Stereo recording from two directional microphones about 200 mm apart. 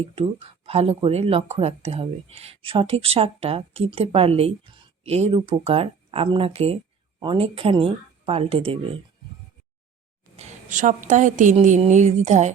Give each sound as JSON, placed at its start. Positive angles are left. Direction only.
{"t": 0.0, "sound": "speech", "side_deg": -30}
{"t": 10.3, "sound": "a woman's voice", "side_deg": -35}